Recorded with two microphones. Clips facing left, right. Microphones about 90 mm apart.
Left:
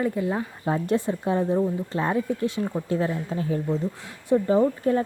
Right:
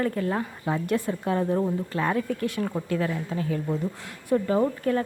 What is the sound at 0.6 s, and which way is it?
Speech, 30° left (ahead or behind).